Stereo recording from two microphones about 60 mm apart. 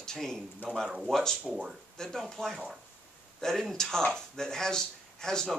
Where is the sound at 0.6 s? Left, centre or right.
Left.